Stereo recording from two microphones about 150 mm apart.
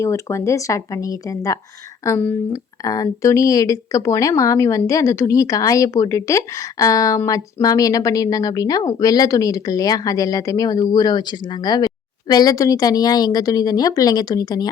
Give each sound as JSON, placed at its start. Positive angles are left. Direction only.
{"t": 0.0, "sound": "speech", "side_deg": 20}